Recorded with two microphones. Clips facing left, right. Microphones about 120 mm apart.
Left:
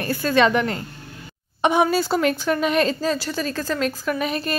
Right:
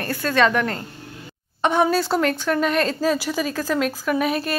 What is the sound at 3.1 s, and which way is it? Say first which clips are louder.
Speech: right 2 dB; 10° right (ahead or behind).